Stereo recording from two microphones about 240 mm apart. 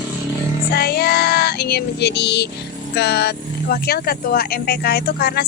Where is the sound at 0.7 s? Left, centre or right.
Left.